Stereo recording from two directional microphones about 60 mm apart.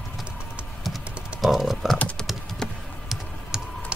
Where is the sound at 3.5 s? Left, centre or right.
Centre.